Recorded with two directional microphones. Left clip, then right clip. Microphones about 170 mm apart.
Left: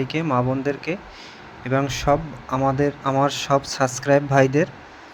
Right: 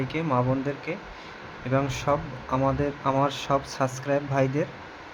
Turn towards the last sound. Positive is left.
turn(degrees=30)  # may be behind; listen again after turning